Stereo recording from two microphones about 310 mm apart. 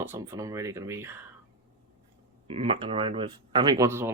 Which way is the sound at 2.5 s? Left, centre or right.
Centre.